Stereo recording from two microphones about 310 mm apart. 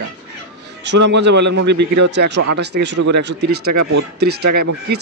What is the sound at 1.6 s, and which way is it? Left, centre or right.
Speech, right.